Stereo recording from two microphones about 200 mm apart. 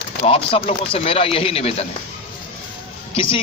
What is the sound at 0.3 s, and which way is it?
A man's voice, 25° left (ahead or behind).